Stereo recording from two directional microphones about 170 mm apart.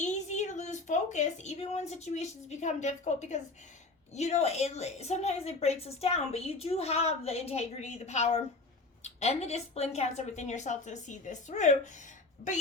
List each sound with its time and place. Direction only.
0.0 s a woman's voice: 45° left (ahead or behind)